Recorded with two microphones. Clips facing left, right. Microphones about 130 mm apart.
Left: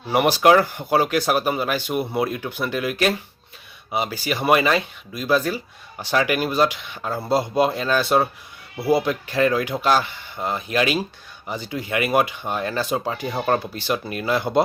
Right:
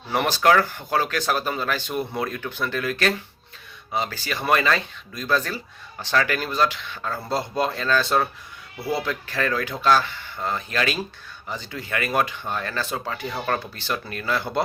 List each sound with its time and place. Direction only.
0.1 s speech: 15° left (ahead or behind)